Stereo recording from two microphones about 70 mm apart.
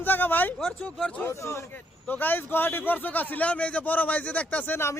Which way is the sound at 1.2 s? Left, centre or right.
Left.